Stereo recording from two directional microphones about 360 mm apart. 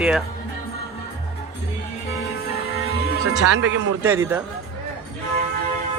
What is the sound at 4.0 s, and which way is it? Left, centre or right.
Speech, centre.